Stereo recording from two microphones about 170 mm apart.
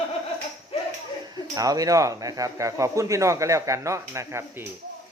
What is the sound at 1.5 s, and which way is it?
Speech, 20° right (ahead or behind).